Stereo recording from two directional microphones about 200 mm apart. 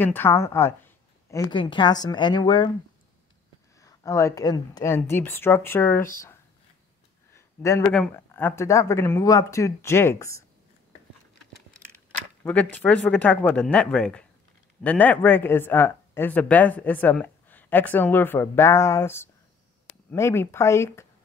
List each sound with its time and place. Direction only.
0.0 s a woman's voice: 10° left (ahead or behind)
3.8 s speech: 15° left (ahead or behind)
7.3 s a sound: 15° left (ahead or behind)
7.9 s speech: 5° left (ahead or behind)
12.4 s speech: 10° left (ahead or behind)